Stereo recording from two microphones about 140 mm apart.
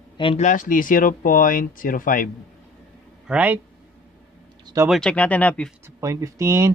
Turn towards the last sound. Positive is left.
turn(degrees=-20)  # may be behind; listen again after turning